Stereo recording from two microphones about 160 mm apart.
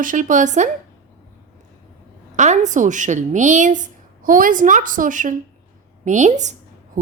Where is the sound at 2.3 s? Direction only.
50° right (ahead or behind).